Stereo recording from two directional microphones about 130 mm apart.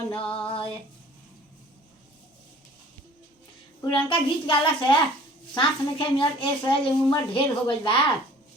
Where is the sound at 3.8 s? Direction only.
40° left (ahead or behind).